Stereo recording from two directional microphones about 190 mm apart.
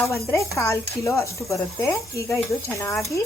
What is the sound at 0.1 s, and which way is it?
Speech, 15° left (ahead or behind).